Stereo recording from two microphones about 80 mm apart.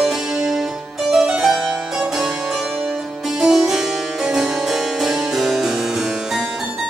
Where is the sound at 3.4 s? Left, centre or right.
Centre.